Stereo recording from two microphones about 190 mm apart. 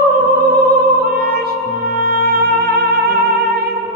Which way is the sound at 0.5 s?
55° right (ahead or behind).